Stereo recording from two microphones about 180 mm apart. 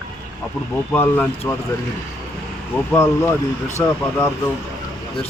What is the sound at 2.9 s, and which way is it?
A man's voice, 15° left (ahead or behind).